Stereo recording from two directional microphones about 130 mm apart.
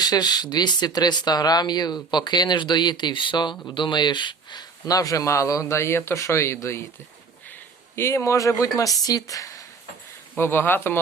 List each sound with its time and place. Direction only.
0.0 s speech: 30° left (ahead or behind)
7.9 s speech: 20° left (ahead or behind)